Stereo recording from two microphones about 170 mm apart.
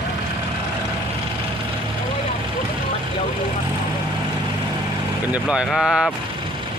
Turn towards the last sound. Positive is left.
turn(degrees=-5)  # may be behind; listen again after turning